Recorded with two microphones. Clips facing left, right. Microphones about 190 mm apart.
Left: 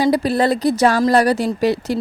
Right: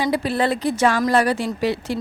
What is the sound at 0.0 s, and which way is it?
Speech, 40° left (ahead or behind).